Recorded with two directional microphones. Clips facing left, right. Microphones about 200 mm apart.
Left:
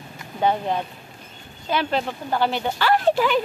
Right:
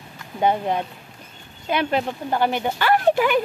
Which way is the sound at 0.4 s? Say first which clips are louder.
Right 1 dB; 15° right (ahead or behind).